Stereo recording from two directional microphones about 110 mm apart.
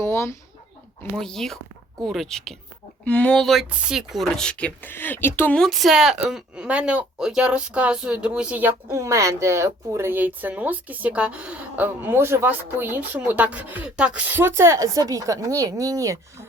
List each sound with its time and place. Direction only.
0.0 s a sound: 25° left (ahead or behind)
1.1 s speech: 5° left (ahead or behind)
5.5 s speech: centre (ahead or behind); by 9.0 s 15° right (ahead or behind)
9.0 s speech: 30° right (ahead or behind)